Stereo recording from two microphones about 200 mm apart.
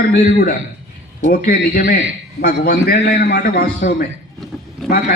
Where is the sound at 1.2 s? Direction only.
45° left (ahead or behind).